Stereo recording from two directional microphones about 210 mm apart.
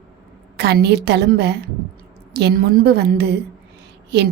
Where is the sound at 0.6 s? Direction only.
50° right (ahead or behind).